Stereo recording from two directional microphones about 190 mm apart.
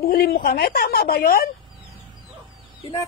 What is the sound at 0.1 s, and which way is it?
Speech, 55° left (ahead or behind).